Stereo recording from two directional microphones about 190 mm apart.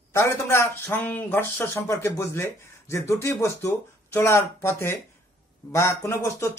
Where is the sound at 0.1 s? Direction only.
15° left (ahead or behind).